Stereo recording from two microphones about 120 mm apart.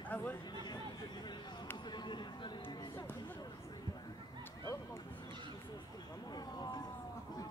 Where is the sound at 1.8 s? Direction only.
40° left (ahead or behind).